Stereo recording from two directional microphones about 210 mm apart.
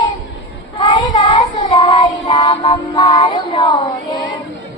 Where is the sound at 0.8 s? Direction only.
20° left (ahead or behind).